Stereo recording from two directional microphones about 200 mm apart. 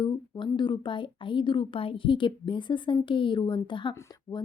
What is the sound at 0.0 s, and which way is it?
Speech, 25° left (ahead or behind).